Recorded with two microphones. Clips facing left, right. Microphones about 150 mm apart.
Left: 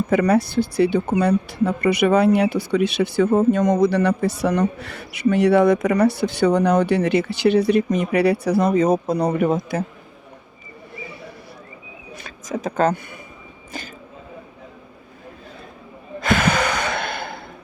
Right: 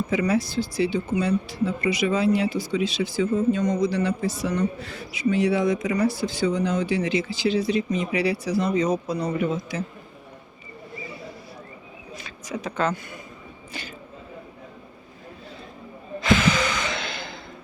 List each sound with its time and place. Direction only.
0.1 s a man's voice: 60° left (ahead or behind)
12.1 s a sound: 50° left (ahead or behind)
16.2 s gasp: 55° left (ahead or behind)